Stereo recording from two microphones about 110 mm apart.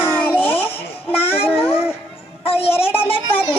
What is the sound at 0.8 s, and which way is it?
Music, 60° left (ahead or behind).